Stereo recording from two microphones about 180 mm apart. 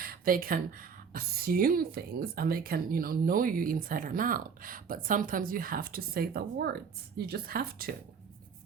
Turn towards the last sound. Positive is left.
turn(degrees=-55)  # may be behind; listen again after turning